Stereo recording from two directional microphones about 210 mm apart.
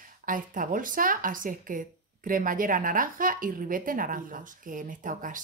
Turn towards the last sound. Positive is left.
turn(degrees=-40)  # may be behind; listen again after turning